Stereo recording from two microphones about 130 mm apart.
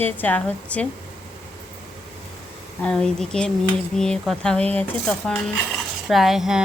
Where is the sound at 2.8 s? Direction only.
5° left (ahead or behind).